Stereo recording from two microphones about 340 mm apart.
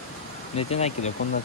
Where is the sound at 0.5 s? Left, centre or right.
Centre.